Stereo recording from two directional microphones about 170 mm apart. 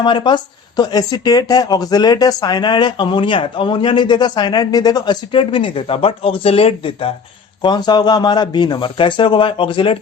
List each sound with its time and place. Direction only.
0.0 s speech: 25° left (ahead or behind)